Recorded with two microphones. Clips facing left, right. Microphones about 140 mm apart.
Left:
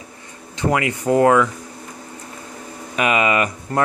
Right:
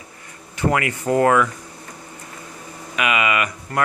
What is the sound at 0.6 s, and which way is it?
Speech, 20° left (ahead or behind).